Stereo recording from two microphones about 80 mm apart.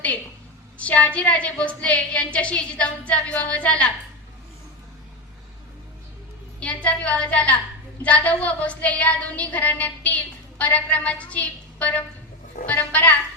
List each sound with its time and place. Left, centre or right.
0.8 s a woman's voice: centre
6.6 s a woman's voice: centre
8.0 s a sound: centre